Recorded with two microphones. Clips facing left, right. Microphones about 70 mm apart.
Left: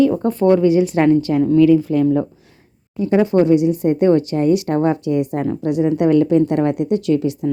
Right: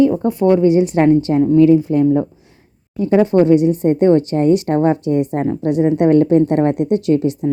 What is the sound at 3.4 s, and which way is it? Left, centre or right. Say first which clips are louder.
A woman's voice: right 2 dB; right.